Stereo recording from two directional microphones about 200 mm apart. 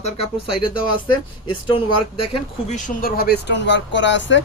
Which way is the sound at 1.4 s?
25° left (ahead or behind).